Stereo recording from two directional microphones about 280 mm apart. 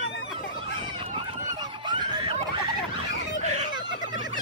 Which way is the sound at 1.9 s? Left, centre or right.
Centre.